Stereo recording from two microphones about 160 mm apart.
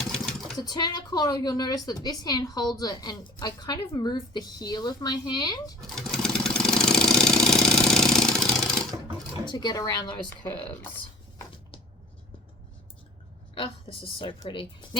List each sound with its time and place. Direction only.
0.0 s a sound: centre (ahead or behind)
0.5 s speech: 25° left (ahead or behind)
5.9 s engine: centre (ahead or behind)
9.5 s speech: 25° left (ahead or behind)
13.5 s a woman's voice: 35° left (ahead or behind)